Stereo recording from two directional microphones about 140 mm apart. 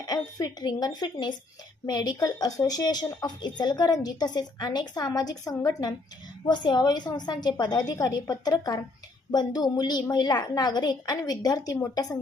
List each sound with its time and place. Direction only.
0.0 s speech: 25° left (ahead or behind)